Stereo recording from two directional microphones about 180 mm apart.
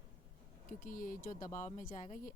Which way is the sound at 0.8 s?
50° left (ahead or behind).